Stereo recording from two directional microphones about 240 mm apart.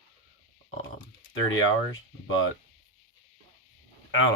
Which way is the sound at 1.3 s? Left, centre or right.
Left.